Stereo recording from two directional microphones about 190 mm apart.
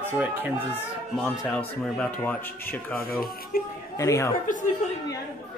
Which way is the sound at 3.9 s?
15° left (ahead or behind).